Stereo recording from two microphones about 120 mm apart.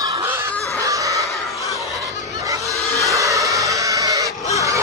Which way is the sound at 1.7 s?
Centre (ahead or behind).